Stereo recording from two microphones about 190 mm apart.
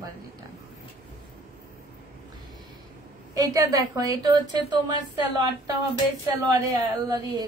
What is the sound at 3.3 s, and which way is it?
Speech, 20° right (ahead or behind).